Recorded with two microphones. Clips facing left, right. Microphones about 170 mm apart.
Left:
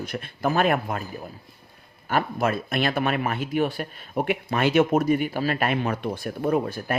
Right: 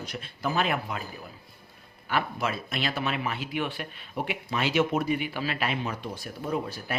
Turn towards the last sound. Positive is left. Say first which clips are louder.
# left 7 dB
turn(degrees=50)  # may be behind; listen again after turning